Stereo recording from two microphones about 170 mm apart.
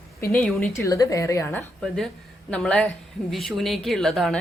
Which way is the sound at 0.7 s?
20° left (ahead or behind).